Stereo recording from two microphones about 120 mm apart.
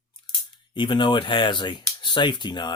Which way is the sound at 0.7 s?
40° left (ahead or behind).